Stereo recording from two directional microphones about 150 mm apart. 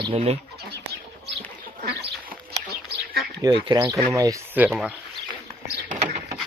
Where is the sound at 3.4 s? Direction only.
30° right (ahead or behind).